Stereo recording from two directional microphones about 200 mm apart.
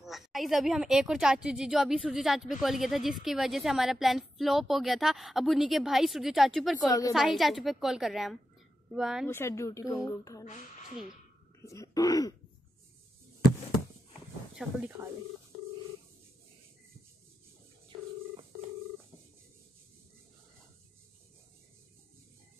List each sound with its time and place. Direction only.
0.0 s a woman's voice: centre (ahead or behind)
6.9 s a woman's voice: 15° left (ahead or behind)
7.2 s a woman's voice: centre (ahead or behind)
9.3 s a woman's voice: 15° left (ahead or behind)
11.6 s a woman's voice: 15° left (ahead or behind)
14.5 s speech: 5° right (ahead or behind)